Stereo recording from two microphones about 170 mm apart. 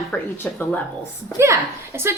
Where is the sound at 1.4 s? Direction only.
15° right (ahead or behind).